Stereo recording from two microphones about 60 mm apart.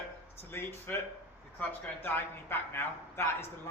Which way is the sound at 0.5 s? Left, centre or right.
Left.